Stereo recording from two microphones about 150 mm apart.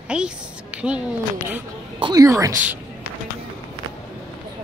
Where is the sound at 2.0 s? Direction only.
25° right (ahead or behind).